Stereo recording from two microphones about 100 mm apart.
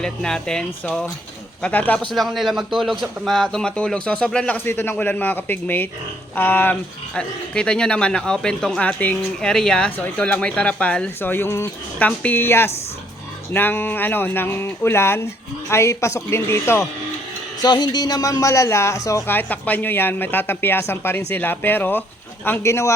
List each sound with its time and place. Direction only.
0.0 s speech: 5° left (ahead or behind)
2.1 s a man's voice: centre (ahead or behind)
4.5 s speech: 20° left (ahead or behind)
11.2 s speech: 25° left (ahead or behind)
11.9 s speech: 15° left (ahead or behind)
17.6 s a man's voice: 45° left (ahead or behind)
19.3 s speech: 20° left (ahead or behind)